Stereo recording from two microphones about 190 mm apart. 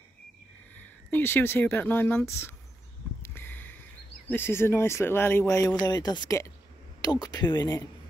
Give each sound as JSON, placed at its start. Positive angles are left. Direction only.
{"t": 0.7, "sound": "speech", "side_deg": 10}
{"t": 3.2, "sound": "a sound", "side_deg": 10}
{"t": 4.3, "sound": "speech", "side_deg": 10}